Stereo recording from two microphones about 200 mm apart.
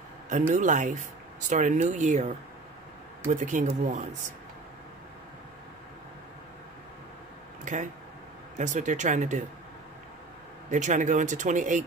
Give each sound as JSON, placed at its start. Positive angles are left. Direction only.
{"t": 0.3, "sound": "speech", "side_deg": -40}
{"t": 7.6, "sound": "speech", "side_deg": -40}
{"t": 10.7, "sound": "speech", "side_deg": -40}